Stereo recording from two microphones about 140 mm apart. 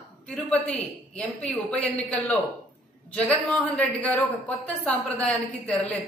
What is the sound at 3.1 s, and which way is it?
A woman's voice, 5° left (ahead or behind).